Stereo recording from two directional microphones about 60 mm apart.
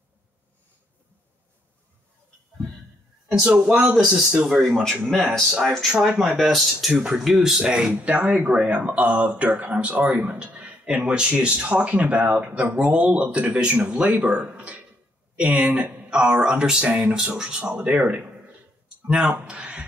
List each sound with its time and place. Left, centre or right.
3.3 s speech: centre
3.9 s speech: centre
5.9 s speech: centre
6.9 s speech: centre